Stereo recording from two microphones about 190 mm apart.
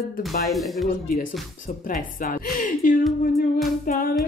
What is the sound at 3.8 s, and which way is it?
Music, 50° left (ahead or behind).